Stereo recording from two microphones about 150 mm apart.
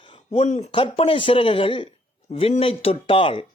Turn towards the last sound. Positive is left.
turn(degrees=35)  # may be behind; listen again after turning